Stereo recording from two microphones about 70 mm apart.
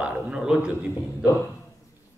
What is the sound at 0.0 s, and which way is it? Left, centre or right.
Speech, centre.